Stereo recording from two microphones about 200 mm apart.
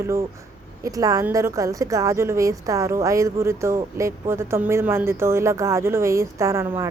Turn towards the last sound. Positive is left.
turn(degrees=-15)  # may be behind; listen again after turning